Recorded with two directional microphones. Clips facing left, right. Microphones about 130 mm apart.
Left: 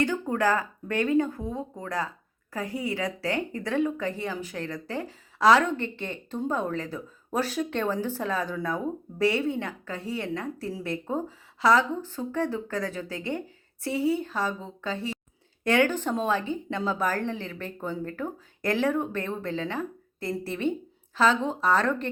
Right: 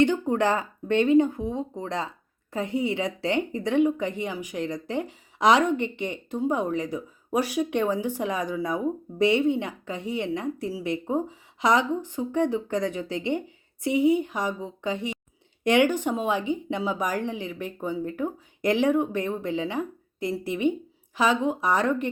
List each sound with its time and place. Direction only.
0.0 s a woman's voice: 20° right (ahead or behind)